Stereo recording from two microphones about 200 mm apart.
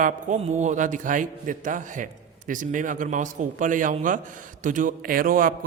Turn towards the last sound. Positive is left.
turn(degrees=-45)  # may be behind; listen again after turning